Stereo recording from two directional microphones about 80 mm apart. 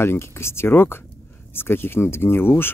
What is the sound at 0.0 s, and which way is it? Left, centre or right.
Speech, left.